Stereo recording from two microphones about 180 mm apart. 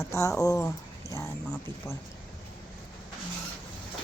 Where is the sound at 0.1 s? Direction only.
20° left (ahead or behind).